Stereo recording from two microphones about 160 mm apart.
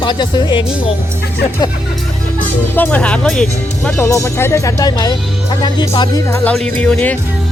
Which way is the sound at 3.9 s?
15° left (ahead or behind).